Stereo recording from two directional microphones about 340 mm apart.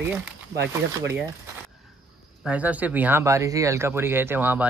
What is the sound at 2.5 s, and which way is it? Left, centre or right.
Speech, centre.